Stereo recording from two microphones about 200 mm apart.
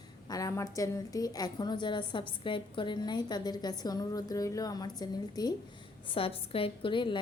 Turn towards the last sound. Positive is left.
turn(degrees=25)  # may be behind; listen again after turning